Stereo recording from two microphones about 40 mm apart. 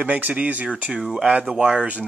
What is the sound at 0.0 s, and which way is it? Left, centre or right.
Speech, right.